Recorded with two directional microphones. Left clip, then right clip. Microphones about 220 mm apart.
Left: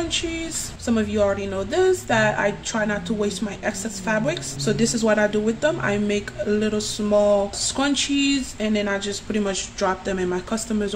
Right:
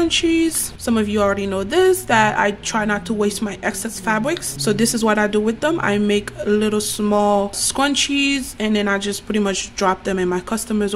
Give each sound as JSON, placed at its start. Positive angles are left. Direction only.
{"t": 0.1, "sound": "speech", "side_deg": -30}